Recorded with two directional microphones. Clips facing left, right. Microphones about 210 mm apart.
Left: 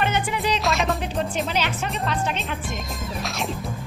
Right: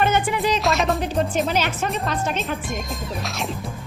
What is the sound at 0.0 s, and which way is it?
Music, 50° right (ahead or behind).